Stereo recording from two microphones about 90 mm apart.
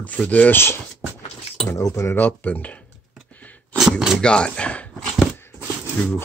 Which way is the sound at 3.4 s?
15° left (ahead or behind).